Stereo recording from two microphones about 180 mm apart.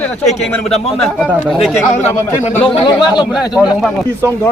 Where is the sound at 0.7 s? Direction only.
35° left (ahead or behind).